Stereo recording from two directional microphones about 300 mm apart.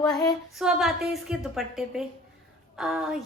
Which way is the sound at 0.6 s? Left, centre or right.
Centre.